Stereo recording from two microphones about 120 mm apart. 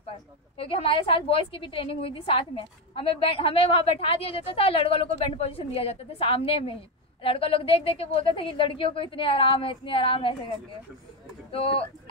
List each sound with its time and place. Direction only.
0.6 s a woman's voice: 50° left (ahead or behind)
11.5 s a woman's voice: 50° left (ahead or behind)